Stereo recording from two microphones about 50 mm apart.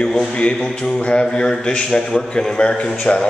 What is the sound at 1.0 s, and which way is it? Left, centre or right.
A man's voice, left.